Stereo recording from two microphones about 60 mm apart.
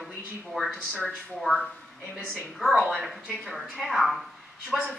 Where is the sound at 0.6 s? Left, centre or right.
Centre.